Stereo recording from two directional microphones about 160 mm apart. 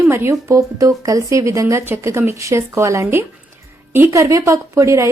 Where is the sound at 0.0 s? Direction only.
15° right (ahead or behind).